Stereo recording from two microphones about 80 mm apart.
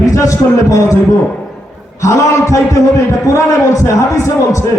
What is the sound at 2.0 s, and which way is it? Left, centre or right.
A man's voice, left.